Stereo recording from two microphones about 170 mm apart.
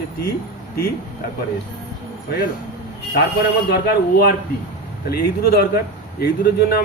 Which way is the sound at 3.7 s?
70° left (ahead or behind).